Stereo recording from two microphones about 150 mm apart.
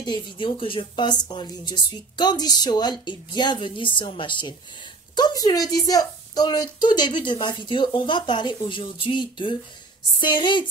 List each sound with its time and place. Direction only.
0.0 s a woman's voice: 30° left (ahead or behind)